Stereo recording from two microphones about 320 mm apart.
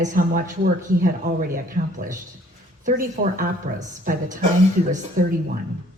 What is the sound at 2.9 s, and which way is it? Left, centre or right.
A woman's voice, right.